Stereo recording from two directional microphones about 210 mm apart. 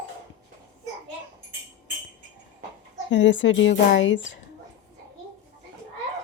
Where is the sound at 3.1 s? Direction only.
60° left (ahead or behind).